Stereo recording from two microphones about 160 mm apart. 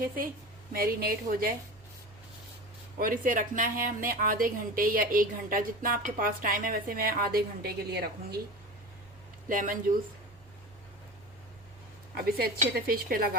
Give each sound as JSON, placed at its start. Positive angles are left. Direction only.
{"t": 0.7, "sound": "speech", "side_deg": -65}
{"t": 3.0, "sound": "a woman's voice", "side_deg": -55}
{"t": 9.5, "sound": "a woman's voice", "side_deg": -55}
{"t": 12.1, "sound": "speech", "side_deg": -70}